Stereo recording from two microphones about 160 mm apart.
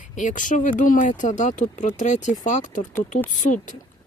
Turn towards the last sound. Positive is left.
turn(degrees=55)  # may be behind; listen again after turning